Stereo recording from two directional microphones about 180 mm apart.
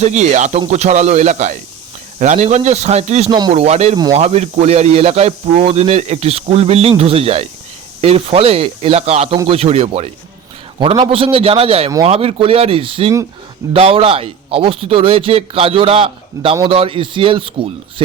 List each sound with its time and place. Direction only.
0.0 s speech: 40° right (ahead or behind)
10.8 s a man's voice: 20° right (ahead or behind)